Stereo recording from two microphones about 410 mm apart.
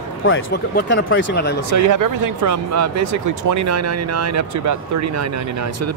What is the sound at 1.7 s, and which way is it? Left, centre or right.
Speech, right.